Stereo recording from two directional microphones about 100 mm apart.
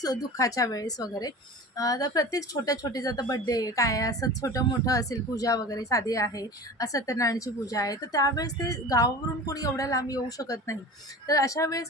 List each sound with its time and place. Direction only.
0.0 s speech: 40° left (ahead or behind)